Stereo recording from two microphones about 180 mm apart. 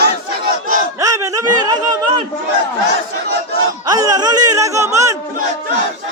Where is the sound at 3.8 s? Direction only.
20° right (ahead or behind).